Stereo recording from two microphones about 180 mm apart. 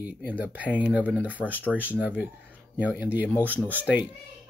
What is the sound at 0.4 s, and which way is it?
Speech, 10° right (ahead or behind).